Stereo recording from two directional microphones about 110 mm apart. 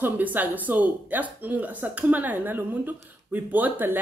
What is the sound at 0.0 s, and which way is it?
Speech, 15° right (ahead or behind).